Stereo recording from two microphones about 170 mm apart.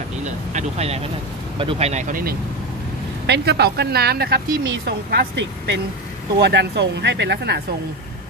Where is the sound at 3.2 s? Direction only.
75° right (ahead or behind).